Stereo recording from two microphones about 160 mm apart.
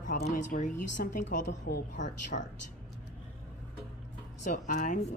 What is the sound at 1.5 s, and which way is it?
Speech, 90° left.